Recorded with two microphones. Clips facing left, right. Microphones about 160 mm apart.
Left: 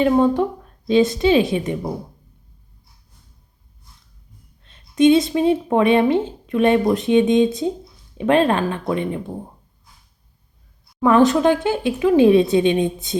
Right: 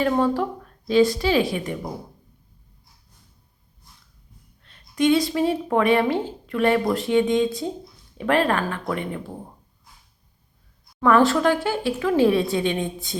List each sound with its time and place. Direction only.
0.0 s speech: 20° left (ahead or behind)
4.6 s speech: 20° left (ahead or behind)
11.0 s speech: 20° left (ahead or behind)